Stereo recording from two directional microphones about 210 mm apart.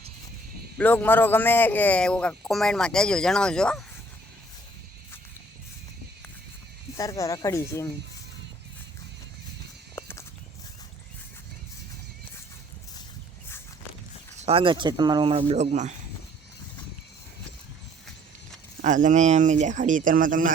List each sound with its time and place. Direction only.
0.8 s a man's voice: 10° left (ahead or behind)
6.9 s speech: 15° left (ahead or behind)
9.9 s horse: 15° left (ahead or behind)
14.3 s speech: 30° right (ahead or behind)
18.8 s speech: 35° right (ahead or behind)